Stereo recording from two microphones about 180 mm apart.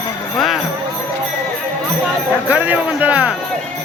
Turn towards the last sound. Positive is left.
turn(degrees=-5)  # may be behind; listen again after turning